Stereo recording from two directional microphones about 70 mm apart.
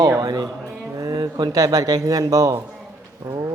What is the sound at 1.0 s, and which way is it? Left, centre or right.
A man's voice, right.